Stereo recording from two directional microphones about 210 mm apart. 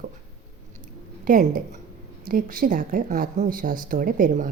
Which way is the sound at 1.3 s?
40° right (ahead or behind).